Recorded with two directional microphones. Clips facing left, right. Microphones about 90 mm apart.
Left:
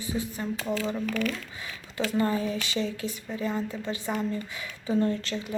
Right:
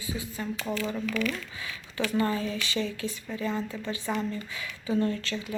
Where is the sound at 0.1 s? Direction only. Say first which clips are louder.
Left 2 dB; 35° left (ahead or behind); by 4.3 s 15° left (ahead or behind).